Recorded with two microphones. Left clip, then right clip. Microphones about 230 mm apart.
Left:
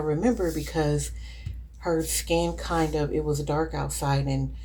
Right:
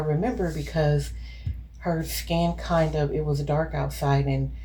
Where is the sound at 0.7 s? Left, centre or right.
Left.